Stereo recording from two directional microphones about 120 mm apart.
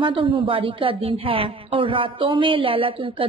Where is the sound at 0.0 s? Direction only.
45° right (ahead or behind).